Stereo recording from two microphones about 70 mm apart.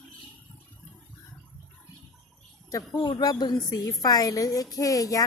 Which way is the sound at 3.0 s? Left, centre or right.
Left.